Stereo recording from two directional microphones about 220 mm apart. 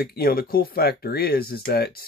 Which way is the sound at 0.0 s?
45° left (ahead or behind).